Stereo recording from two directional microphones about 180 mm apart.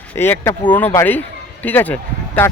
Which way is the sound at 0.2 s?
10° left (ahead or behind).